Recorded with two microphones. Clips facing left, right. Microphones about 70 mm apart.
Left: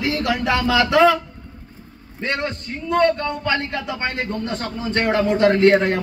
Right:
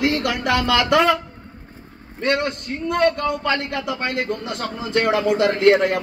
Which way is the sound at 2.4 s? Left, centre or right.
Right.